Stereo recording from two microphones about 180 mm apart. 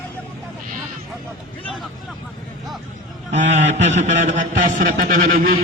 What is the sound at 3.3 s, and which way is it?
A man's voice, 40° right (ahead or behind).